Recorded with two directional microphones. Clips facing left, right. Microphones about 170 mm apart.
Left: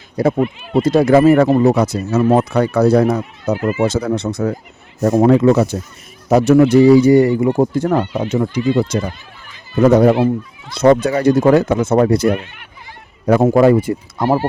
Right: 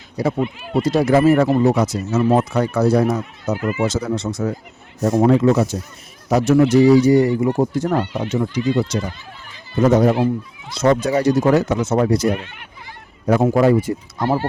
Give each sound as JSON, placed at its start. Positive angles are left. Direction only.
{"t": 0.2, "sound": "speech", "side_deg": 55}
{"t": 5.2, "sound": "speech", "side_deg": 70}